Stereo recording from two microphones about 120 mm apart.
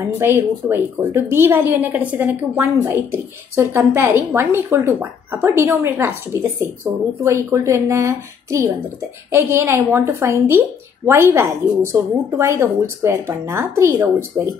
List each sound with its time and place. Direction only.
0.0 s a woman's voice: 20° right (ahead or behind)